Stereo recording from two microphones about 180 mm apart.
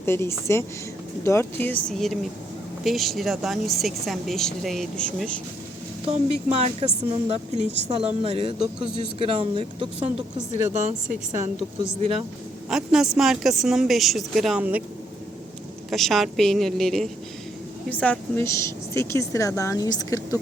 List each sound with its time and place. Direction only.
0.0 s speech: 15° left (ahead or behind)
6.1 s speech: 35° right (ahead or behind)
10.7 s speech: 40° right (ahead or behind)
12.6 s speech: 5° right (ahead or behind)
15.9 s speech: centre (ahead or behind); by 20.4 s 20° left (ahead or behind)